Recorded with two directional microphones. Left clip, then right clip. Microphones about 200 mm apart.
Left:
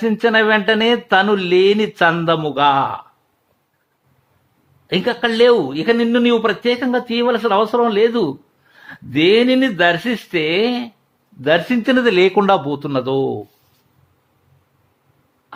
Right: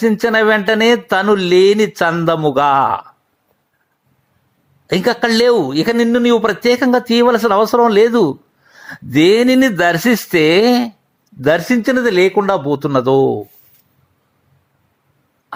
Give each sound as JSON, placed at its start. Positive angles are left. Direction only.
{"t": 0.2, "sound": "speech", "side_deg": -15}
{"t": 2.5, "sound": "a man's voice", "side_deg": -35}
{"t": 4.9, "sound": "a man's voice", "side_deg": -20}
{"t": 12.6, "sound": "a man's voice", "side_deg": -20}